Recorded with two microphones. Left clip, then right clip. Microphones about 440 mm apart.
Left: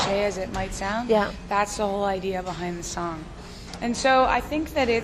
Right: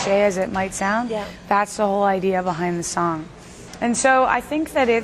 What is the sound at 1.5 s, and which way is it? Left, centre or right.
A woman's voice, right.